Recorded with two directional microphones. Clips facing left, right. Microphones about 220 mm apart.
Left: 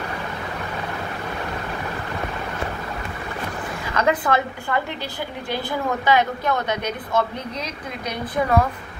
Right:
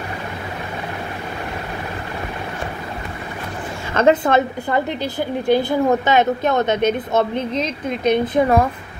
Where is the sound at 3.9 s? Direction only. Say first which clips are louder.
Right 6 dB; 25° right (ahead or behind).